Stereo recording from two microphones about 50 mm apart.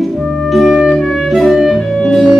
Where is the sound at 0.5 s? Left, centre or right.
Centre.